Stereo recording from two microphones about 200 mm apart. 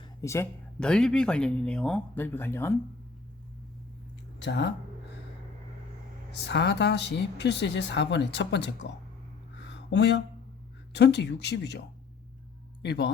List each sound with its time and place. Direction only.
0.2 s speech: 15° left (ahead or behind)
4.4 s speech: 60° left (ahead or behind)
6.4 s speech: 60° left (ahead or behind)
9.6 s a sound: 60° left (ahead or behind)
10.9 s speech: 60° left (ahead or behind)
12.8 s speech: 55° left (ahead or behind)